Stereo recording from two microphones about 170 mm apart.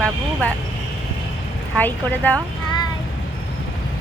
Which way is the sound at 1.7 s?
10° left (ahead or behind).